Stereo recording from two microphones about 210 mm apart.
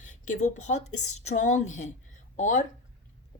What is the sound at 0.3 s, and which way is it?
Speech, 35° left (ahead or behind).